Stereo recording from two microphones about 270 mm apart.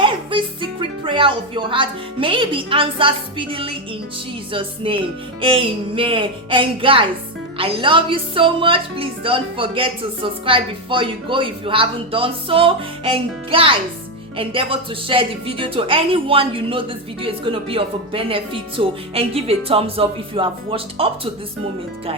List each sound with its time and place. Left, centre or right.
0.0 s speech: centre